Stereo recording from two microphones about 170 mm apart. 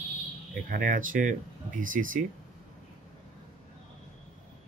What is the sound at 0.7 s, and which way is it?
Speech, 50° right (ahead or behind).